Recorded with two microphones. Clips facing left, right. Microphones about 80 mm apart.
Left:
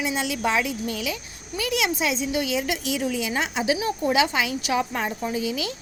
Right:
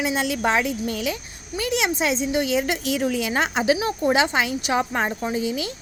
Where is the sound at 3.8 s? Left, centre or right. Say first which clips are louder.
Right 2 dB; right.